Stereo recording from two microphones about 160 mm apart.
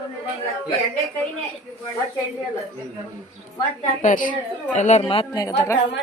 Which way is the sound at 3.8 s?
55° left (ahead or behind).